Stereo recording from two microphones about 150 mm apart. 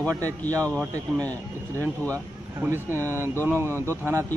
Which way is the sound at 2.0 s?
15° right (ahead or behind).